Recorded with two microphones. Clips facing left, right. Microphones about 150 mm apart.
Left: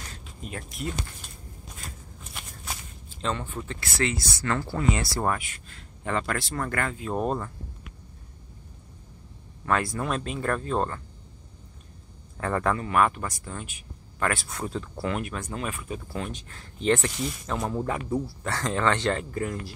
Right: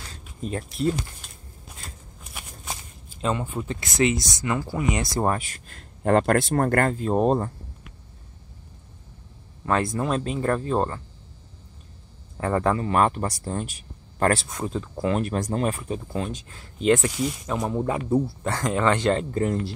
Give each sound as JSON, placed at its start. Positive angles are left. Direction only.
{"t": 0.4, "sound": "speech", "side_deg": -30}
{"t": 2.6, "sound": "walk", "side_deg": -20}
{"t": 3.3, "sound": "speech", "side_deg": -15}
{"t": 5.3, "sound": "speech", "side_deg": -35}
{"t": 5.7, "sound": "speech", "side_deg": -50}
{"t": 9.7, "sound": "speech", "side_deg": -25}
{"t": 12.4, "sound": "speech", "side_deg": -25}
{"t": 14.5, "sound": "speech", "side_deg": -15}
{"t": 15.1, "sound": "speech", "side_deg": -40}
{"t": 16.1, "sound": "speech", "side_deg": -20}